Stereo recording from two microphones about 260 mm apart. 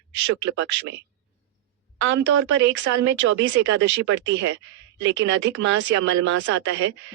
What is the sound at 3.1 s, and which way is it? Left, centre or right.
Speech, right.